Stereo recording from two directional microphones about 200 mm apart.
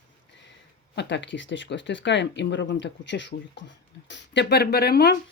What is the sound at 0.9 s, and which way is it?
Speech, 60° left (ahead or behind).